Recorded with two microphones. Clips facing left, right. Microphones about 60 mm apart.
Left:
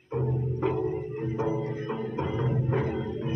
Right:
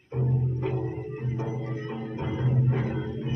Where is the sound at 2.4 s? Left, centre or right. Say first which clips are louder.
Right 1 dB; left.